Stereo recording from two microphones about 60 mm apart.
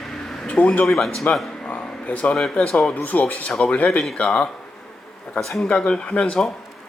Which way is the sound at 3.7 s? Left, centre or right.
Left.